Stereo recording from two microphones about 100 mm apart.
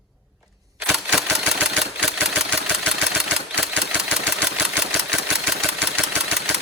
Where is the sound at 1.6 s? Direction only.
5° right (ahead or behind).